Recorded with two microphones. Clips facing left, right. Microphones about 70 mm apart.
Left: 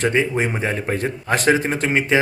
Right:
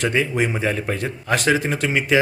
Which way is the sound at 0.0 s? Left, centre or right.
Left.